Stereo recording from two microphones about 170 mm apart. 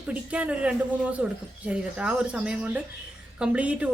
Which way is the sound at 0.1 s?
10° right (ahead or behind).